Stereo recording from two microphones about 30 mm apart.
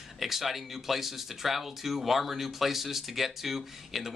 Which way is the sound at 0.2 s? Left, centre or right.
Centre.